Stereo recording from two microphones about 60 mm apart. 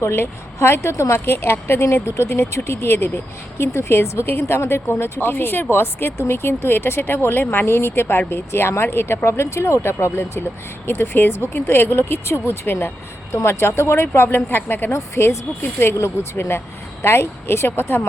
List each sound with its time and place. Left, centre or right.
0.0 s speech: left
1.2 s speech: left
5.3 s speech: left
14.9 s speech: left